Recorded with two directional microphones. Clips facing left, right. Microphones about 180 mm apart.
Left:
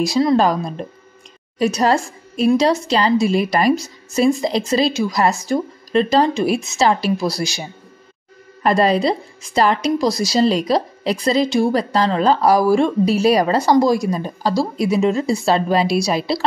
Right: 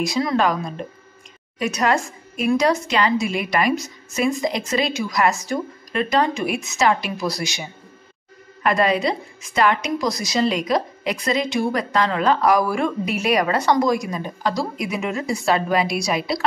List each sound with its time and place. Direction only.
0.0 s a woman's voice: 30° left (ahead or behind)
8.6 s a woman's voice: 35° left (ahead or behind)